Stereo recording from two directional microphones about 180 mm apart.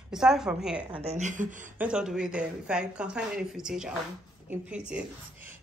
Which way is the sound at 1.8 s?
5° right (ahead or behind).